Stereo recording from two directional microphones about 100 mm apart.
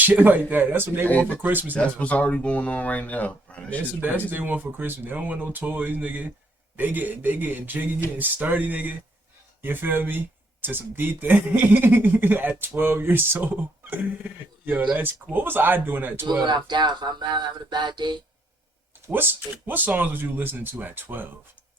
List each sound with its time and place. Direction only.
0.0 s speech: 15° right (ahead or behind)
1.7 s speech: 15° left (ahead or behind)
4.0 s speech: 20° right (ahead or behind)
16.2 s speech: 45° right (ahead or behind)
19.0 s speech: 20° right (ahead or behind)